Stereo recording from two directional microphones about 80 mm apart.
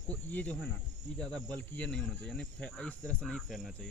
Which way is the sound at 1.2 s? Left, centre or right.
Centre.